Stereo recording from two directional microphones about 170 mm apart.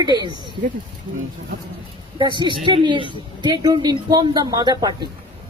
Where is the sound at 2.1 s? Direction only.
25° right (ahead or behind).